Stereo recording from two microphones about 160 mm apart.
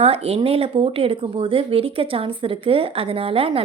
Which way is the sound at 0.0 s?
40° right (ahead or behind).